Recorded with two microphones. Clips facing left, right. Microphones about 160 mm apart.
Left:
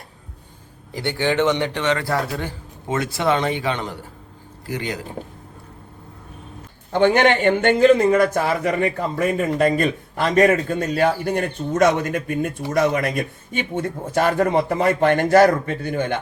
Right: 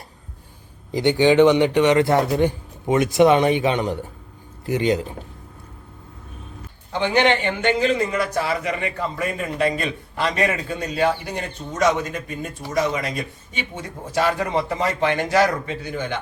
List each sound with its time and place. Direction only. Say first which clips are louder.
0.9 s a man's voice: right 6 dB; 15° right (ahead or behind)
6.9 s a man's voice: left 3 dB; 50° left (ahead or behind)